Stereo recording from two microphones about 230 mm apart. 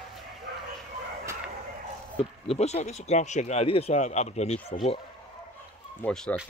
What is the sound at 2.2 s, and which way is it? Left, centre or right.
Speech, left.